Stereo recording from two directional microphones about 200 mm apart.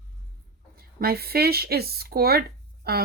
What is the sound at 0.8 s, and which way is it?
Speech, 50° right (ahead or behind).